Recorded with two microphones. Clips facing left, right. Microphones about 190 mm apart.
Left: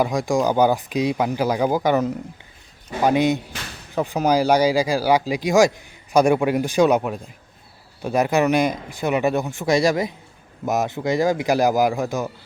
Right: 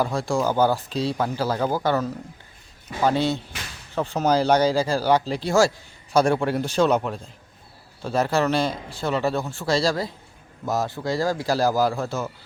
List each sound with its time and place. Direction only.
0.0 s a man's voice: 15° left (ahead or behind)